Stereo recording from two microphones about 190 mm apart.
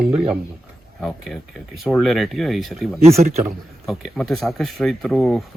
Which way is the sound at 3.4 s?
Centre (ahead or behind).